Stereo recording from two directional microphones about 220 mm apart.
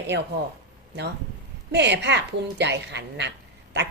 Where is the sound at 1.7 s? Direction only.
50° right (ahead or behind).